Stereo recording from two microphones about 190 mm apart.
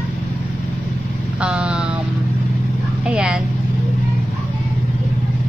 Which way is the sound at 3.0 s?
5° right (ahead or behind).